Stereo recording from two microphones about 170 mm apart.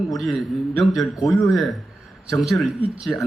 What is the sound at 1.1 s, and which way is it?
Speech, 20° left (ahead or behind).